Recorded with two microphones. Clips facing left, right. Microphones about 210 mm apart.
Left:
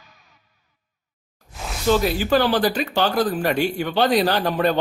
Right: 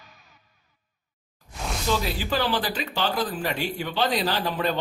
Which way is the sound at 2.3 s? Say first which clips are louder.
Left 7 dB; 60° left (ahead or behind).